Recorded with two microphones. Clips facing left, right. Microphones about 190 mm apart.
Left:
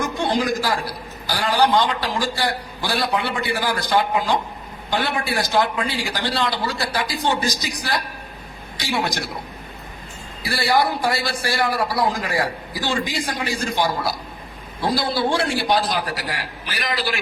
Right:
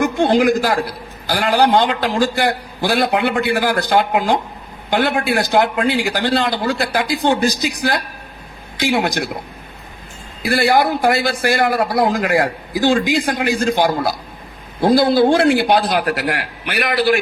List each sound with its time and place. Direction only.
0.0 s a man's voice: 60° right (ahead or behind)
10.5 s a man's voice: 55° right (ahead or behind)